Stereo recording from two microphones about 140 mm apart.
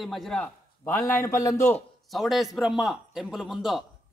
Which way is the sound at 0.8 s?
20° left (ahead or behind).